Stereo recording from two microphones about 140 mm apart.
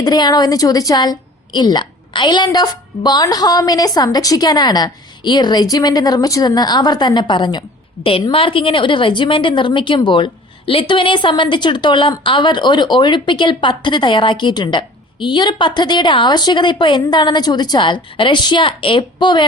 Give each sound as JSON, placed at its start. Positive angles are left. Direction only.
{"t": 0.0, "sound": "a woman's voice", "side_deg": 30}